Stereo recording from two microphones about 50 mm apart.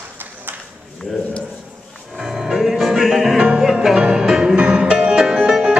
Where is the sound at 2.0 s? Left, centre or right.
Centre.